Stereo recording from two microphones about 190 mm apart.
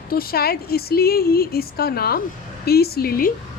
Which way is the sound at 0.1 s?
50° left (ahead or behind).